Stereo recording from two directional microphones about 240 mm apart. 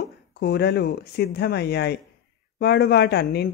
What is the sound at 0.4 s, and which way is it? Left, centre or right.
A woman's voice, left.